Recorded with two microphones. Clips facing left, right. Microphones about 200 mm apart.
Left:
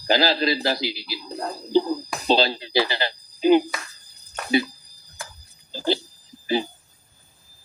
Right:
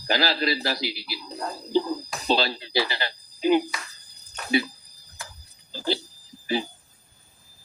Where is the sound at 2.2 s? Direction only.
25° left (ahead or behind).